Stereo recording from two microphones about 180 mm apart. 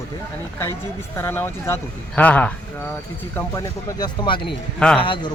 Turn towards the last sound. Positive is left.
turn(degrees=30)  # may be behind; listen again after turning